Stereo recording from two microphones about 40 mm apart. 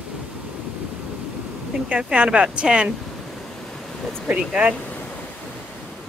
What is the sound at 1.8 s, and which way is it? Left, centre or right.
Speech, right.